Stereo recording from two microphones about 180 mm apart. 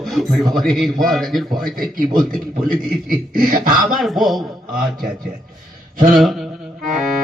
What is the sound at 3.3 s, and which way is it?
Music, 50° right (ahead or behind).